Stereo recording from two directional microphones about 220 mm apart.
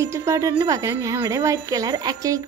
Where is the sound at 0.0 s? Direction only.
15° right (ahead or behind).